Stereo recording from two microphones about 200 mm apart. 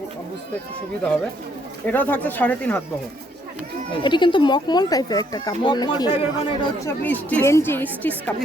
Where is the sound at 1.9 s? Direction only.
10° left (ahead or behind).